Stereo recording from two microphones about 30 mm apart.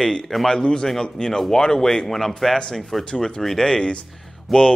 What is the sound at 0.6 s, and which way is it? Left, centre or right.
Speech, left.